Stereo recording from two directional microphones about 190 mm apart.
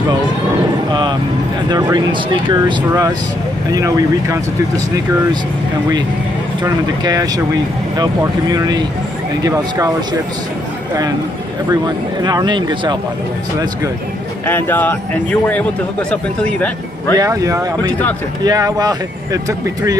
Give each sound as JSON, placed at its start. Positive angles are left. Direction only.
{"t": 1.7, "sound": "speech", "side_deg": -20}
{"t": 6.6, "sound": "speech", "side_deg": -20}
{"t": 11.7, "sound": "speech", "side_deg": -20}
{"t": 14.4, "sound": "speech", "side_deg": 10}
{"t": 17.2, "sound": "speech", "side_deg": -20}